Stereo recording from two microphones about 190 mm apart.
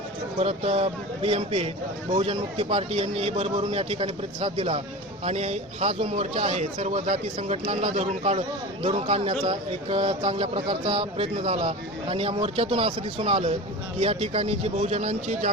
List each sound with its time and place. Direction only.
0.3 s a man's voice: 30° right (ahead or behind)